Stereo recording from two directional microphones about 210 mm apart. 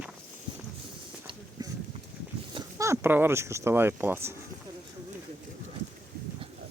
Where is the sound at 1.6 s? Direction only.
20° right (ahead or behind).